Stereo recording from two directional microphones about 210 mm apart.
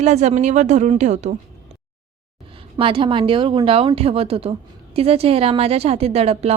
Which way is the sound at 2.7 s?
25° right (ahead or behind).